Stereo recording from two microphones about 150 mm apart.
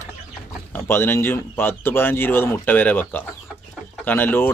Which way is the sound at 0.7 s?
15° left (ahead or behind).